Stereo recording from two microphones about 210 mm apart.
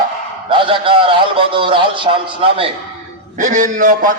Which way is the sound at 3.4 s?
40° right (ahead or behind).